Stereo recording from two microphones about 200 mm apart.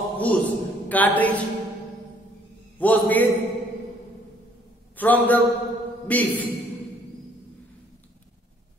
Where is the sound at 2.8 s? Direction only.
10° left (ahead or behind).